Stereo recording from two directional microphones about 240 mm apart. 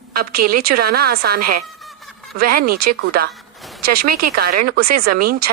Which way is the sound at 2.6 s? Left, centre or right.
Right.